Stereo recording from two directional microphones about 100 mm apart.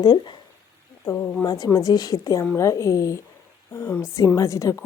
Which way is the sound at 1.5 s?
40° left (ahead or behind).